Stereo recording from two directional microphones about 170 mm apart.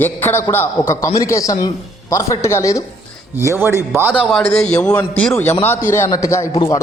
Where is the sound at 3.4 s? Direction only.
15° right (ahead or behind).